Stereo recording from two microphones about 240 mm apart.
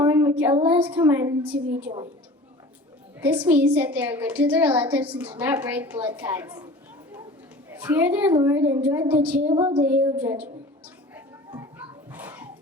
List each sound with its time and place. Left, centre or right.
0.0 s a woman's voice: centre
3.4 s a woman's voice: centre
7.7 s a woman's voice: centre
9.5 s a sound: centre
9.8 s a woman's voice: centre
11.1 s a sound: centre